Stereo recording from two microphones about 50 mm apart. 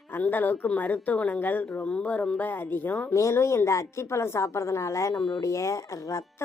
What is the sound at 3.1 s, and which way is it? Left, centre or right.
A woman's voice, left.